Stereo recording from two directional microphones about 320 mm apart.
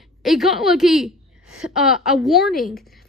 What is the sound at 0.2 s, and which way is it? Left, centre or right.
A woman's voice, centre.